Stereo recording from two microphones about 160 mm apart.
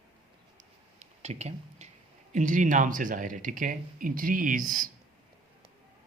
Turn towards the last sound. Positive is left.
turn(degrees=-60)  # may be behind; listen again after turning